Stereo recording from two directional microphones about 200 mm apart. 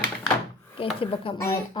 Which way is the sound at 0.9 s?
25° left (ahead or behind).